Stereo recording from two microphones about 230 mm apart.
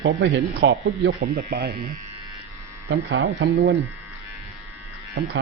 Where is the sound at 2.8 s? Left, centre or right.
Right.